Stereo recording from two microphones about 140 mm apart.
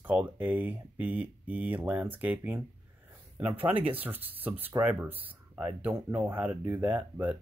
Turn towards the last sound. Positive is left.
turn(degrees=-10)  # may be behind; listen again after turning